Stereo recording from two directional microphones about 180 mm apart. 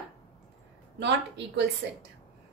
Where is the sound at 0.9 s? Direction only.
75° right (ahead or behind).